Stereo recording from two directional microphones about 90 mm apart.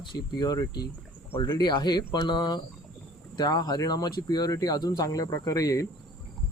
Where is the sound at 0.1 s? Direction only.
50° left (ahead or behind).